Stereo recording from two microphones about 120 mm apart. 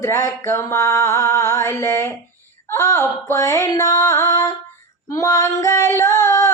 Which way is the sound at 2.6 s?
25° left (ahead or behind).